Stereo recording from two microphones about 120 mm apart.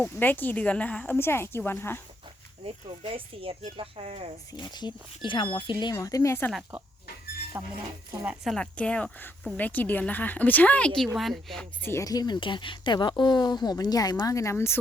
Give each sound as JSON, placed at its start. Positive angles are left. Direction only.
{"t": 0.0, "sound": "a woman's voice", "side_deg": 15}
{"t": 2.6, "sound": "speech", "side_deg": -50}
{"t": 4.5, "sound": "speech", "side_deg": 35}
{"t": 5.9, "sound": "speech", "side_deg": 30}
{"t": 7.6, "sound": "speech", "side_deg": -20}
{"t": 8.4, "sound": "a woman's voice", "side_deg": 10}
{"t": 11.8, "sound": "a woman's voice", "side_deg": 20}